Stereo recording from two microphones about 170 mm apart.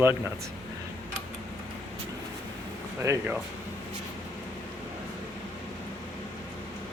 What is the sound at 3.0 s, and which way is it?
Speech, 15° right (ahead or behind).